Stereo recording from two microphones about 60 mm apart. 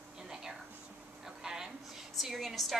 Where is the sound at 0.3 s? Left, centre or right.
Centre.